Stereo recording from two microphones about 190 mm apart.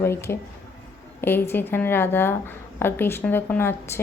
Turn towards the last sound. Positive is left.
turn(degrees=10)  # may be behind; listen again after turning